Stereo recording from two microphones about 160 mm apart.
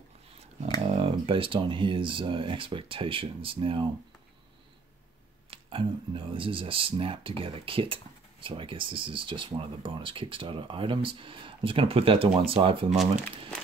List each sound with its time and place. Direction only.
0.8 s speech: 35° right (ahead or behind)
5.5 s speech: 35° right (ahead or behind)